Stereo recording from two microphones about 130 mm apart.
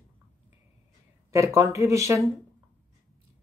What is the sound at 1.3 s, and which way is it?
Speech, 25° right (ahead or behind).